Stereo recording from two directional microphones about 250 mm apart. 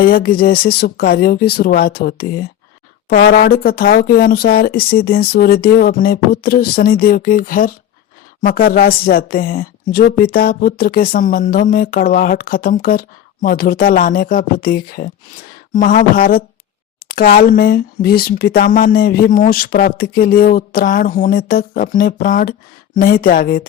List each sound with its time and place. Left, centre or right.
0.0 s speech: left